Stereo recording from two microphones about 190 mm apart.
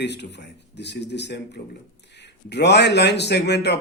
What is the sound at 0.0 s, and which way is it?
A man's voice, 65° left (ahead or behind).